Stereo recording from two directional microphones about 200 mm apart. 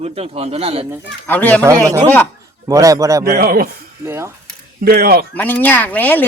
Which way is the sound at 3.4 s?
45° right (ahead or behind).